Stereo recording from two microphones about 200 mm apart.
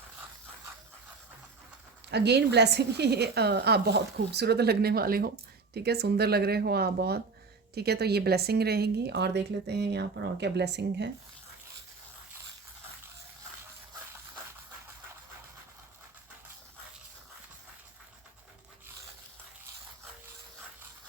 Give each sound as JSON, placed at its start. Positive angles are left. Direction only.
{"t": 2.0, "sound": "a woman's voice", "side_deg": -55}